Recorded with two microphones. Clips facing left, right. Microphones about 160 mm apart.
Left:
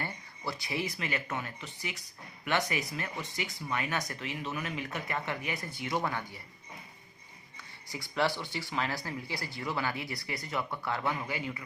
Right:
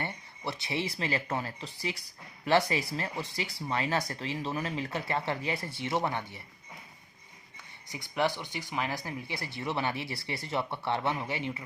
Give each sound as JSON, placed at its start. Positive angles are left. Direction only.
{"t": 0.0, "sound": "speech", "side_deg": -25}
{"t": 7.9, "sound": "speech", "side_deg": -20}